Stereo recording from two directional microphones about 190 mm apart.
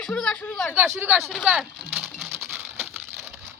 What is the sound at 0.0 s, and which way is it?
Speech, 5° left (ahead or behind).